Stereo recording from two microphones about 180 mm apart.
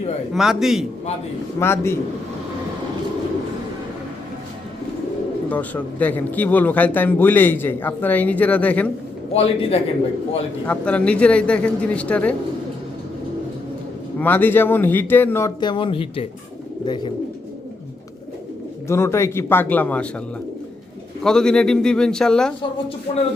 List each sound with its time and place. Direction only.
0.3 s a man's voice: centre (ahead or behind)
1.5 s a man's voice: 15° left (ahead or behind)
5.5 s a man's voice: 10° left (ahead or behind)
9.3 s a man's voice: 30° left (ahead or behind)
10.7 s a man's voice: 5° left (ahead or behind)
14.2 s a man's voice: 10° left (ahead or behind)
18.9 s a man's voice: 15° left (ahead or behind)
21.2 s a man's voice: 5° left (ahead or behind)